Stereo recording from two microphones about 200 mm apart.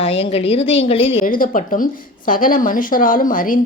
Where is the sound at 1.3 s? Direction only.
45° left (ahead or behind).